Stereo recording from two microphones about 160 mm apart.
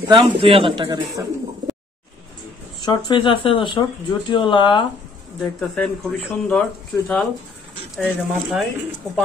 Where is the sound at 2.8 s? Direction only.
30° left (ahead or behind).